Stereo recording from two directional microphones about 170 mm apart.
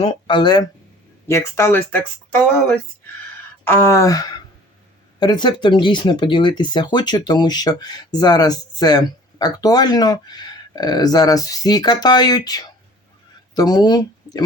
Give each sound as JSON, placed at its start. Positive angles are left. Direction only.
{"t": 0.0, "sound": "speech", "side_deg": 30}
{"t": 1.3, "sound": "speech", "side_deg": 15}